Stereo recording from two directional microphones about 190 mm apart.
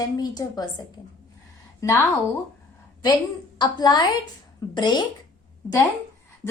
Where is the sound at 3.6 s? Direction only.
20° left (ahead or behind).